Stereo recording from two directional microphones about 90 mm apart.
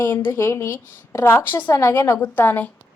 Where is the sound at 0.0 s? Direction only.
25° left (ahead or behind).